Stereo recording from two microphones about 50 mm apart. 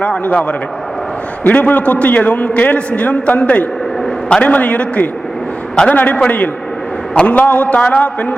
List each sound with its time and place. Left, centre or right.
0.3 s a man's voice: left